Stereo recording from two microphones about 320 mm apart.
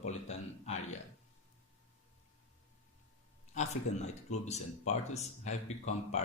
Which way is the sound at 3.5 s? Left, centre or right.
Left.